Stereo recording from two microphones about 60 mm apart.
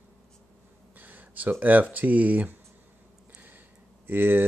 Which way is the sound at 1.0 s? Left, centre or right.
Right.